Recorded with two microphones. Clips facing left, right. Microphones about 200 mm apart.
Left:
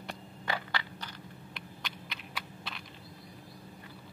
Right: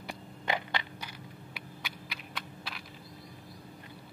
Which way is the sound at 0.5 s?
20° right (ahead or behind).